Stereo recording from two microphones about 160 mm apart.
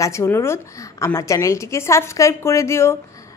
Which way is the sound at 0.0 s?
15° left (ahead or behind).